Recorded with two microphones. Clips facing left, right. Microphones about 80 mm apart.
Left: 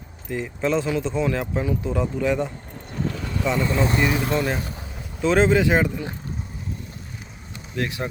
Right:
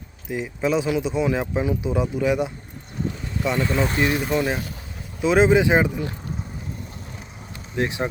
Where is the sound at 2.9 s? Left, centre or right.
Left.